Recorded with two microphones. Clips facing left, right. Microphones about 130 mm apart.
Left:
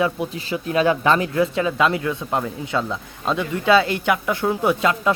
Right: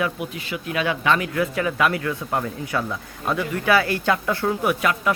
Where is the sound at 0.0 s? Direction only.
30° left (ahead or behind).